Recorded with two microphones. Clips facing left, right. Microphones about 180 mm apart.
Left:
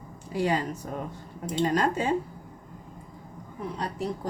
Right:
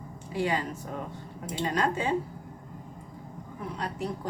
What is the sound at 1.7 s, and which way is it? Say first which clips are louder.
Speech: even; 40° left (ahead or behind).